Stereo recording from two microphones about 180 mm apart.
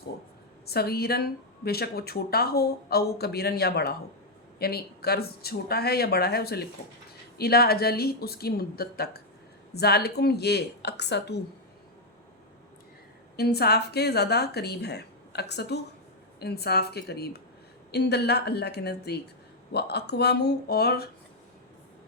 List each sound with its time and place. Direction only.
0.6 s speech: 60° left (ahead or behind)
13.3 s speech: 60° left (ahead or behind)